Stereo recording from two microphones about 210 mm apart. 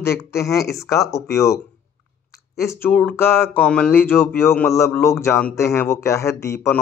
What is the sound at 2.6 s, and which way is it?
Speech, 10° left (ahead or behind).